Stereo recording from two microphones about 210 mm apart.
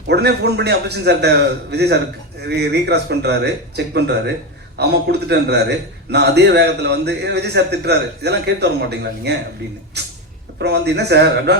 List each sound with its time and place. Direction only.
0.1 s a man's voice: 50° right (ahead or behind)